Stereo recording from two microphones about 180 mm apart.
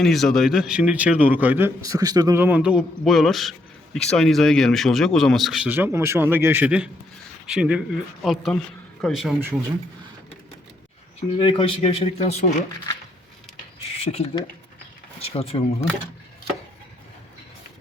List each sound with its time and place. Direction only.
0.0 s a man's voice: centre (ahead or behind)
9.4 s a man's voice: 15° right (ahead or behind)
11.3 s speech: 30° left (ahead or behind)
14.0 s speech: 35° left (ahead or behind)